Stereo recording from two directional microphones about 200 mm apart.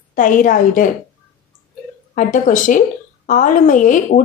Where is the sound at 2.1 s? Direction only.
40° left (ahead or behind).